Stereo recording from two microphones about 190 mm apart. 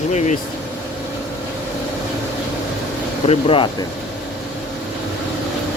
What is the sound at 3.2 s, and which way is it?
Speech, 30° left (ahead or behind).